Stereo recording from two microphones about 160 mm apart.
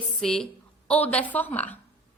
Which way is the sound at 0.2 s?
5° left (ahead or behind).